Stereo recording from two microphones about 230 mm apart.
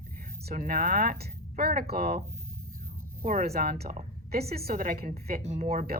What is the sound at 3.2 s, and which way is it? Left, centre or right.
A woman's voice, right.